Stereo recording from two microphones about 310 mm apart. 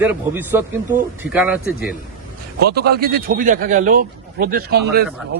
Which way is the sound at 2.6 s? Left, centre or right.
Right.